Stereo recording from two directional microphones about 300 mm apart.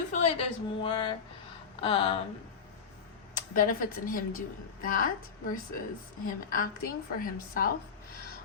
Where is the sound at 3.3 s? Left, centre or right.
Left.